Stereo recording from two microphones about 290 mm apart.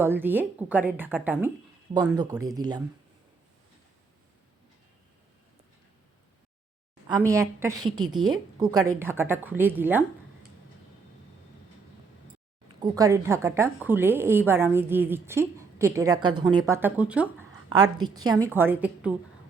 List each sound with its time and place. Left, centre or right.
0.0 s a woman's voice: centre
7.1 s a woman's voice: centre
7.9 s a woman's voice: right
8.5 s a woman's voice: centre
12.8 s a woman's voice: centre